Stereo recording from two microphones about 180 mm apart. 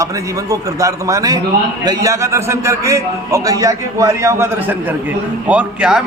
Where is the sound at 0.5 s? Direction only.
20° right (ahead or behind).